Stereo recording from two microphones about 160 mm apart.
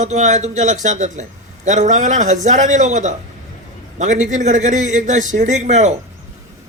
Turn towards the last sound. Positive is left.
turn(degrees=-50)  # may be behind; listen again after turning